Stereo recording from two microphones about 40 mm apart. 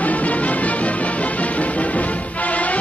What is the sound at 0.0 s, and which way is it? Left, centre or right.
Music, left.